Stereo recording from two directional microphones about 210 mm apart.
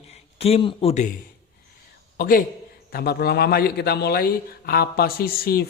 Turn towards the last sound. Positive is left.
turn(degrees=45)  # may be behind; listen again after turning